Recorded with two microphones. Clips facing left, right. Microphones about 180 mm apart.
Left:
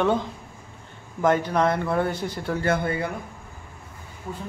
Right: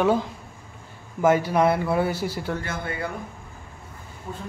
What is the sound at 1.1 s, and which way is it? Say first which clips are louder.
Speech: right 2 dB; 10° right (ahead or behind).